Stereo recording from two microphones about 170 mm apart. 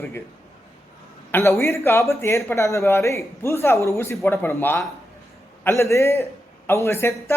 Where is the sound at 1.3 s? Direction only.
15° left (ahead or behind).